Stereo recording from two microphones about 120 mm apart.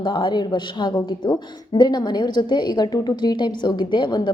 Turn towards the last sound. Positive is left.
turn(degrees=40)  # may be behind; listen again after turning